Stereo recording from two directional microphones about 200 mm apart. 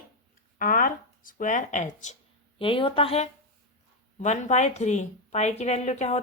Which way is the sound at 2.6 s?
25° left (ahead or behind).